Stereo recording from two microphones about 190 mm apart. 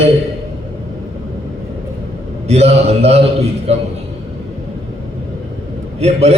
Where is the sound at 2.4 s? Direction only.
35° right (ahead or behind).